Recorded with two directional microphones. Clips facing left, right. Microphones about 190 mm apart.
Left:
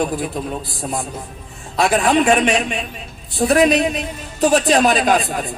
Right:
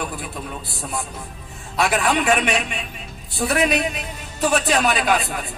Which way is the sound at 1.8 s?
30° left (ahead or behind).